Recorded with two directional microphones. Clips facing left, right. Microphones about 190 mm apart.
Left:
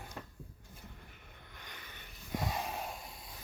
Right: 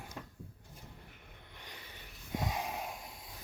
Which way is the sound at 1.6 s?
30° right (ahead or behind).